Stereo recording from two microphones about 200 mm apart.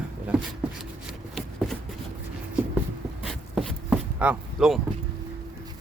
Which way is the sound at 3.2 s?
5° right (ahead or behind).